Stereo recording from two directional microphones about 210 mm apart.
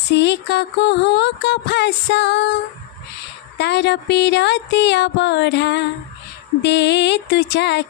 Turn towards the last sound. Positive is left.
turn(degrees=55)  # may be behind; listen again after turning